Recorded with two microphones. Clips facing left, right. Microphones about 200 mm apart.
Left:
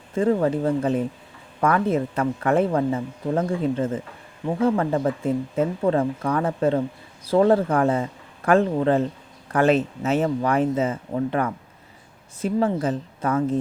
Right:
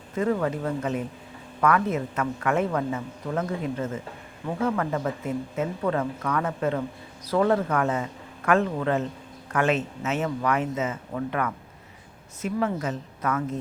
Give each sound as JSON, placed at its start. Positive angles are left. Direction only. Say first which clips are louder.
{"t": 0.1, "sound": "speech", "louder": "left 5 dB", "side_deg": 30}